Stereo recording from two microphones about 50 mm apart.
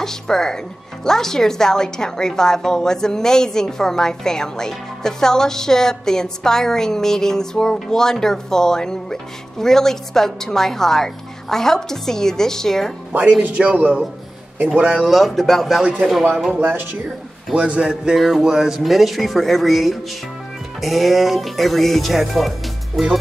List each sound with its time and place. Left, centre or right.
0.0 s a woman's voice: centre
13.4 s a man's voice: right
15.0 s speech: centre
17.6 s a man's voice: centre
18.1 s speech: centre